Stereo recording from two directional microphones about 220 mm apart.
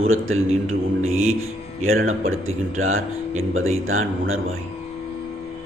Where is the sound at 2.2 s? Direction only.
65° right (ahead or behind).